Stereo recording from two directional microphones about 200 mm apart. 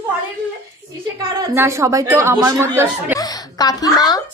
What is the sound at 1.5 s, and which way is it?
A woman's voice, 15° right (ahead or behind).